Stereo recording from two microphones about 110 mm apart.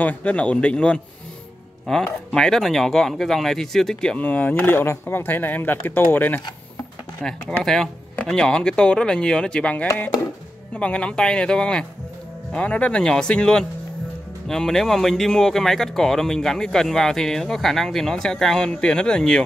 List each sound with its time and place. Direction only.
0.0 s speech: 15° left (ahead or behind)
7.2 s speech: 5° left (ahead or behind)